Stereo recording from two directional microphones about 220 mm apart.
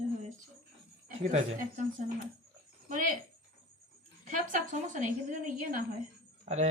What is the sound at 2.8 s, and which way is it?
Speech, 35° right (ahead or behind).